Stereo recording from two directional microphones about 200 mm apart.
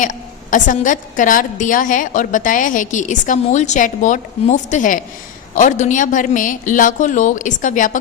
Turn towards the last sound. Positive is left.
turn(degrees=40)  # may be behind; listen again after turning